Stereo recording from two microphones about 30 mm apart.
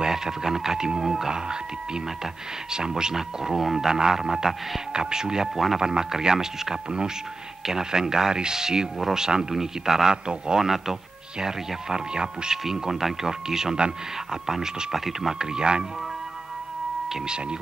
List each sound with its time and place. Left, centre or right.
0.0 s speech: centre
2.7 s speech: right
10.2 s speech: right
10.6 s speech: centre
11.3 s speech: right; by 15.3 s centre
15.3 s speech: right